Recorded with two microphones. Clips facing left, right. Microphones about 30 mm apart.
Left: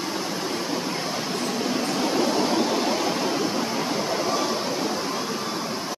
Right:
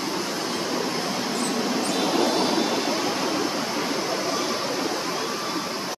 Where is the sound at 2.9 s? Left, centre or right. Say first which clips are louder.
Left 1 dB; centre.